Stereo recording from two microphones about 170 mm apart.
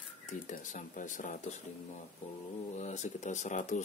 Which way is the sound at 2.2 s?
40° left (ahead or behind).